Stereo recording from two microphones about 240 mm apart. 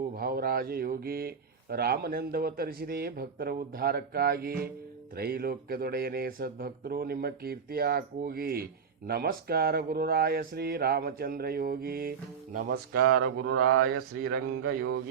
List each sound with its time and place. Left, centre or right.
0.2 s speech: right
13.1 s mantra: right
14.8 s a sound: right